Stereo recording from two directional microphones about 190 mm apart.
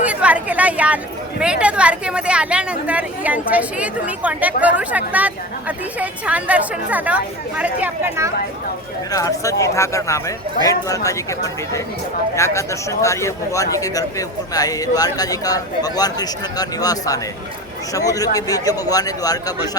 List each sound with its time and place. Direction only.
0.0 s a woman's voice: 5° right (ahead or behind)
9.1 s speech: 15° left (ahead or behind)